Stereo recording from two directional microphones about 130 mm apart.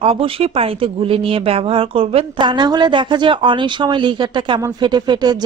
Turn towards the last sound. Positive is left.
turn(degrees=-35)  # may be behind; listen again after turning